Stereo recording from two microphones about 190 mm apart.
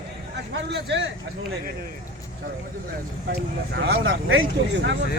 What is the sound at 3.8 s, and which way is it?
Speech, 90° right.